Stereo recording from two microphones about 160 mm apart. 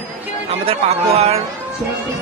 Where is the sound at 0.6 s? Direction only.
40° right (ahead or behind).